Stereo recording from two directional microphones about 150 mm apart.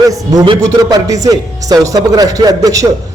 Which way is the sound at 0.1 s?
25° right (ahead or behind).